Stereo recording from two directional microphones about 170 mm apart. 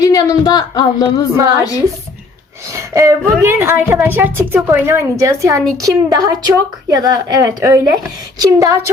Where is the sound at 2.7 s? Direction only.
20° right (ahead or behind).